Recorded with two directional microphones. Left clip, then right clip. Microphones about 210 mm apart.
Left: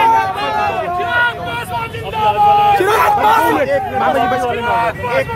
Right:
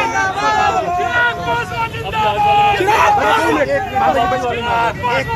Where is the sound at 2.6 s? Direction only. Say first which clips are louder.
Left 1 dB; 50° left (ahead or behind).